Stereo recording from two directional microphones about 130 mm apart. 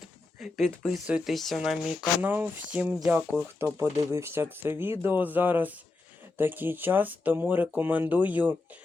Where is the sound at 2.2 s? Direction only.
15° right (ahead or behind).